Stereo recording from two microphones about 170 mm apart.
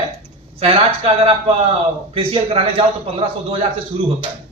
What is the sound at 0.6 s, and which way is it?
A man's voice, 35° right (ahead or behind).